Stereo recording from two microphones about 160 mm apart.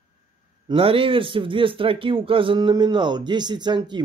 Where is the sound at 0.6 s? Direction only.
35° right (ahead or behind).